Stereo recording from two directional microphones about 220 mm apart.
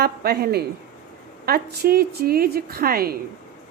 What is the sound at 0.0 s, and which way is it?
Speech, 45° right (ahead or behind).